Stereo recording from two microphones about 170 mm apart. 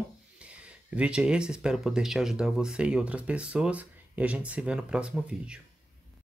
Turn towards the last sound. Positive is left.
turn(degrees=-5)  # may be behind; listen again after turning